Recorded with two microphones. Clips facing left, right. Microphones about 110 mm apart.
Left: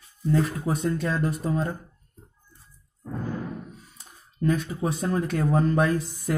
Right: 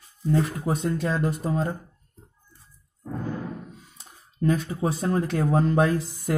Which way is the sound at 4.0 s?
35° right (ahead or behind).